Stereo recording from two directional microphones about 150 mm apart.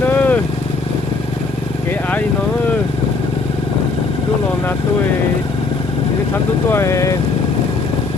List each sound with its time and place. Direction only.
0.1 s vehicle: 10° left (ahead or behind)
6.7 s speech: 15° left (ahead or behind)